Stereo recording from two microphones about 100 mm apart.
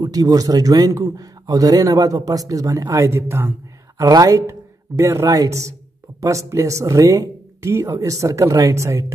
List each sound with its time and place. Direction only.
0.0 s a man's voice: 35° right (ahead or behind)
4.0 s a man's voice: 35° right (ahead or behind)